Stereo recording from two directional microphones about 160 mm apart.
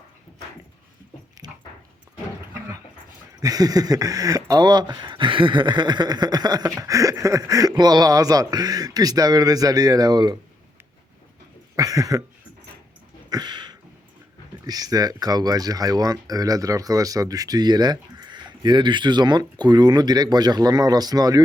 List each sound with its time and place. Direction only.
1.4 s dog: 25° right (ahead or behind)
3.4 s speech: 25° right (ahead or behind)
11.8 s speech: 20° right (ahead or behind)
13.3 s a sound: 25° right (ahead or behind)
14.7 s speech: 25° right (ahead or behind)